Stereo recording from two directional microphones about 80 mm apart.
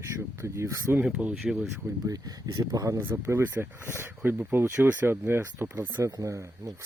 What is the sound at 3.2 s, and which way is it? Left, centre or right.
Speech, right.